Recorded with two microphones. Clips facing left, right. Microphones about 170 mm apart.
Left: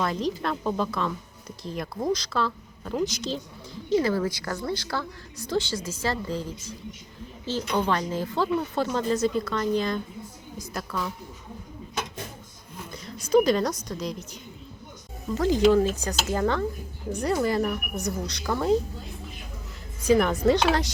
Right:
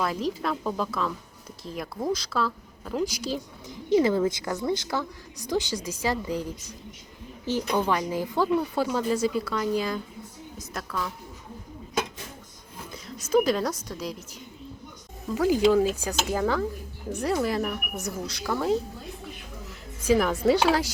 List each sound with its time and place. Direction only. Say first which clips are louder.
0.0 s speech: left 1 dB; 5° right (ahead or behind)
12.9 s a woman's voice: left 2 dB; 5° right (ahead or behind)
15.4 s speech: left 1 dB; 10° right (ahead or behind)
20.1 s speech: left 1 dB; 5° right (ahead or behind)